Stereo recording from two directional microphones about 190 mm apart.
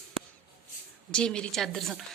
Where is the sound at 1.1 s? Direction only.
5° left (ahead or behind).